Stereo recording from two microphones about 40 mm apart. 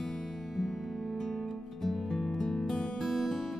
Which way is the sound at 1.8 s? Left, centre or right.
Centre.